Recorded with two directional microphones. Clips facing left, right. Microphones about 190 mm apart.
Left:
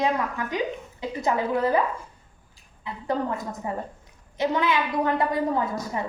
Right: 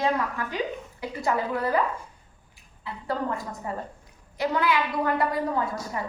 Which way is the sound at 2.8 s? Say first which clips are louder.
Left 2 dB; 20° left (ahead or behind).